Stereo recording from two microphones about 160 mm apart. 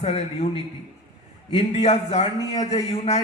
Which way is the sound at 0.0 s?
40° left (ahead or behind).